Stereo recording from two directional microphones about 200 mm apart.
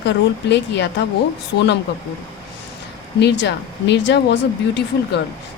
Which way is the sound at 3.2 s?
60° left (ahead or behind).